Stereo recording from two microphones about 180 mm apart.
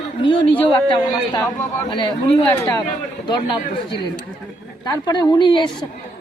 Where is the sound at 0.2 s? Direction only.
30° left (ahead or behind).